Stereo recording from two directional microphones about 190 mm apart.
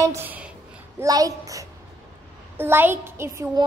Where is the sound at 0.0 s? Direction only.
15° right (ahead or behind).